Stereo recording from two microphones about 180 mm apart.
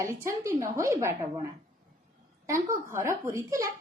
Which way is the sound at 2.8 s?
15° right (ahead or behind).